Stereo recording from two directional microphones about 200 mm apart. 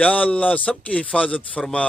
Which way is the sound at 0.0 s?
5° left (ahead or behind).